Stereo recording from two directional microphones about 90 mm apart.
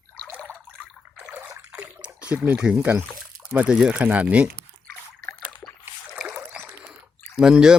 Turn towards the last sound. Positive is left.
turn(degrees=-10)  # may be behind; listen again after turning